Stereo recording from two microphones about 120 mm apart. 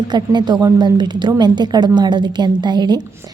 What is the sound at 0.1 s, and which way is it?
A woman's voice, 35° right (ahead or behind).